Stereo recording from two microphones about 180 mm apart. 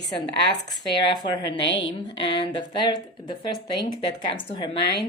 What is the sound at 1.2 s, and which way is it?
Speech, 25° left (ahead or behind).